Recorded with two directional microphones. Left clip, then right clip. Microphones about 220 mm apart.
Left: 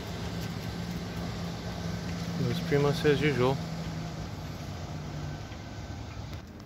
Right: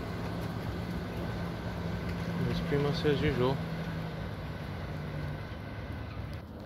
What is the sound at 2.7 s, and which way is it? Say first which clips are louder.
Speech: left 5 dB; 25° left (ahead or behind).